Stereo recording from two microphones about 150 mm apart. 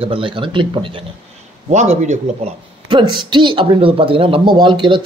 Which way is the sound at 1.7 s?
50° right (ahead or behind).